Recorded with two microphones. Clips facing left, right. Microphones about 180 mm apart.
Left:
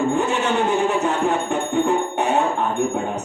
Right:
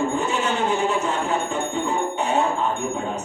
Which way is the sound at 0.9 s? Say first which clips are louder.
Left 3 dB; 60° left (ahead or behind).